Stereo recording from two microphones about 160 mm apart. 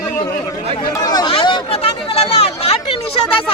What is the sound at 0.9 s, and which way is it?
Chatter, 25° left (ahead or behind).